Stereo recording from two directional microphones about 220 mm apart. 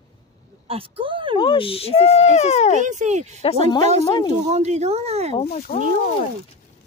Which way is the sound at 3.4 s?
25° left (ahead or behind).